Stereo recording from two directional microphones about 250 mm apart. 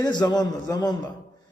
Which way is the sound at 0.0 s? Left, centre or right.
Centre.